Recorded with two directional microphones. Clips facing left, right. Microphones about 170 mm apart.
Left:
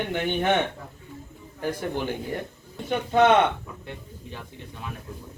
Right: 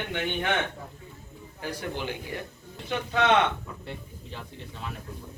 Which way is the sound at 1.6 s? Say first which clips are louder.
Left 5 dB; 50° left (ahead or behind).